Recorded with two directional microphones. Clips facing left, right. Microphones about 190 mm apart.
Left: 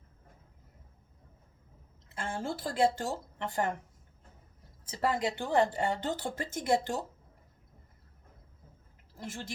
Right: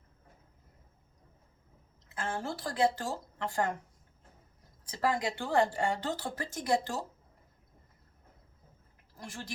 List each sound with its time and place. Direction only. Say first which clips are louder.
2.2 s a woman's voice: left 1 dB; 25° left (ahead or behind)
4.9 s a woman's voice: left 1 dB; 25° left (ahead or behind)
9.1 s a woman's voice: left 3 dB; 25° left (ahead or behind)